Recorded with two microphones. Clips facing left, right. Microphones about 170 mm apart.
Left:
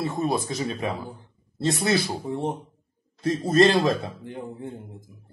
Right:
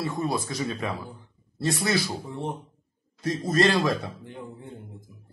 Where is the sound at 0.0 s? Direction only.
20° left (ahead or behind).